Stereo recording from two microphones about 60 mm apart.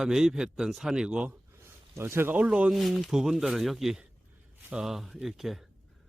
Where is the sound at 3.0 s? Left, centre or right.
Centre.